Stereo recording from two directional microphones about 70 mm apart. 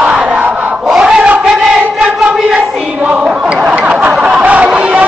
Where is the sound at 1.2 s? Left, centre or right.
Centre.